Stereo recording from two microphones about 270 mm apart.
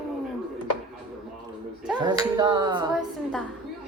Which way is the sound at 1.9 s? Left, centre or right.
Centre.